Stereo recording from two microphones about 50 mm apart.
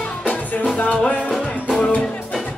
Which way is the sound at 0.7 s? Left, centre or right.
Left.